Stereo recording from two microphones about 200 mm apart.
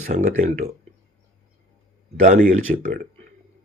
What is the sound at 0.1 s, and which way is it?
Speech, 40° right (ahead or behind).